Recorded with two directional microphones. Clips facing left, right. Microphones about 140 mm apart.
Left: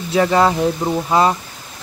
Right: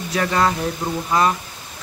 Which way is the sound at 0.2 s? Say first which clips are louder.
Left 6 dB; 20° left (ahead or behind).